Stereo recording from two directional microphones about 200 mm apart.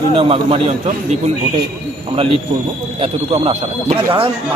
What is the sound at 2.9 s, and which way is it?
Speech, 25° right (ahead or behind).